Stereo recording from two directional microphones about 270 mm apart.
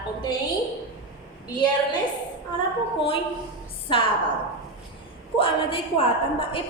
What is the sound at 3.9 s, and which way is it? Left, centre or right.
Speech, centre.